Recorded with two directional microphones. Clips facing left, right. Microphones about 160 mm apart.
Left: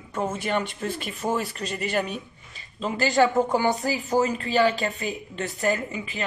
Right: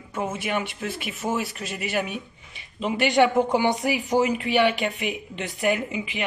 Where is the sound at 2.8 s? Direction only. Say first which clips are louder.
Right 1 dB; 20° right (ahead or behind).